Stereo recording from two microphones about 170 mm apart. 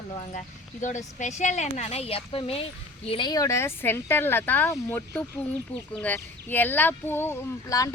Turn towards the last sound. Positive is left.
turn(degrees=20)  # may be behind; listen again after turning